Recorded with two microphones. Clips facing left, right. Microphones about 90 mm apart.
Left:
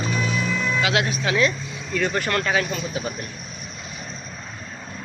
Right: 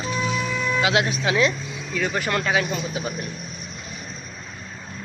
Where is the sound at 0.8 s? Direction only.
25° right (ahead or behind).